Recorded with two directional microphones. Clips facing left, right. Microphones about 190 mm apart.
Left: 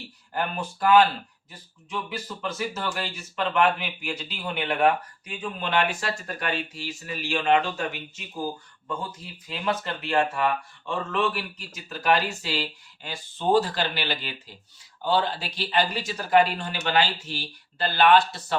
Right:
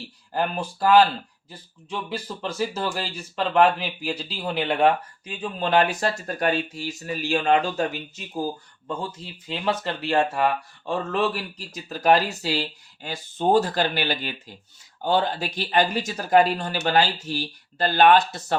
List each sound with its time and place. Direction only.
0.3 s speech: 30° right (ahead or behind)
8.9 s speech: 30° right (ahead or behind); by 18.5 s 45° right (ahead or behind)